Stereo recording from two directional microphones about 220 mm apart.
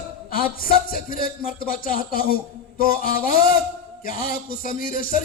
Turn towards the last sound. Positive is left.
turn(degrees=40)  # may be behind; listen again after turning